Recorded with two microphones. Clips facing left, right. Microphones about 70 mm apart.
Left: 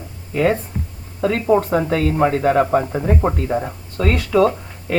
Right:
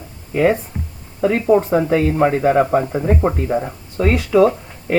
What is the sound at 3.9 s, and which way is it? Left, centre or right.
Speech, centre.